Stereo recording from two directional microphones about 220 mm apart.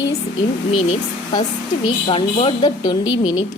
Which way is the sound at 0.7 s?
25° left (ahead or behind).